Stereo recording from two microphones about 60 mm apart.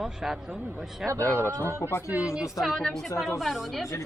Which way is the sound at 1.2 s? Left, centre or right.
Left.